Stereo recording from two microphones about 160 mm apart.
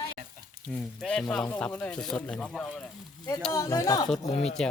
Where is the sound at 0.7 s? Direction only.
5° left (ahead or behind).